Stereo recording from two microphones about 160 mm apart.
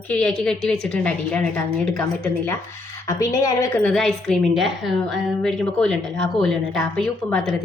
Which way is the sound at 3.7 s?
Centre (ahead or behind).